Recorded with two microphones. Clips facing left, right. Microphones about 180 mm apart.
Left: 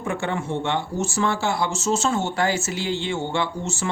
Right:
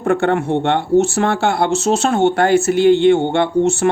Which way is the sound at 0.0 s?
60° right (ahead or behind).